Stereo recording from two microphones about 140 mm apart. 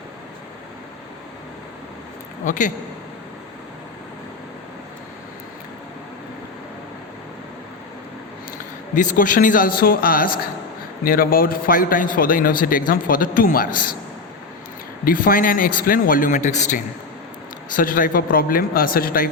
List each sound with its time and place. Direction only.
2.5 s a man's voice: 65° left (ahead or behind)
9.0 s a man's voice: 65° left (ahead or behind); by 13.9 s 85° left
15.0 s a man's voice: 80° left; by 16.8 s 60° left (ahead or behind)
17.7 s speech: 75° left (ahead or behind)